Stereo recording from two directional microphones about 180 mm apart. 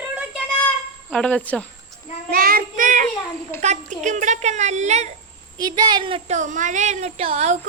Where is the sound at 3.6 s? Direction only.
40° right (ahead or behind).